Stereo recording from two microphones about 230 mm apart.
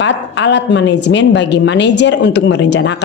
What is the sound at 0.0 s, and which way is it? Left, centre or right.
A woman's voice, left.